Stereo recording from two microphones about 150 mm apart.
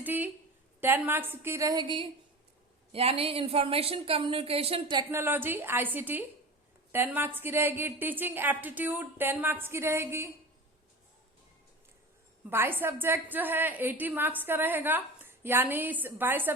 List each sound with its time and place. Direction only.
0.0 s a sound: 10° right (ahead or behind)
0.8 s a woman's voice: 15° right (ahead or behind); by 5.0 s 35° right (ahead or behind)
5.1 s a woman's voice: 15° right (ahead or behind)
12.5 s a woman's voice: 15° right (ahead or behind)